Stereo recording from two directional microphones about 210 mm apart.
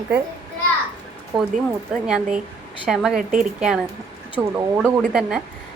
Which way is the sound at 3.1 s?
40° right (ahead or behind).